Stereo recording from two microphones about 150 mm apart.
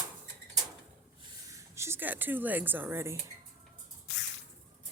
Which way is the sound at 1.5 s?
20° right (ahead or behind).